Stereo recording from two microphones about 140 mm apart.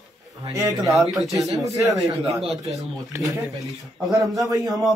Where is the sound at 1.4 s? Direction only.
25° right (ahead or behind).